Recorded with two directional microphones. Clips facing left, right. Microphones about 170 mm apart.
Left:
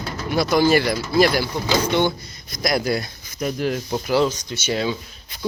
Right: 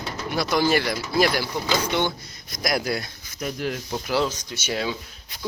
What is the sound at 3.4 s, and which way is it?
Speech, 30° left (ahead or behind).